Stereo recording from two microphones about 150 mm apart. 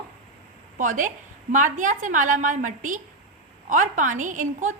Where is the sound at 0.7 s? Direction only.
60° right (ahead or behind).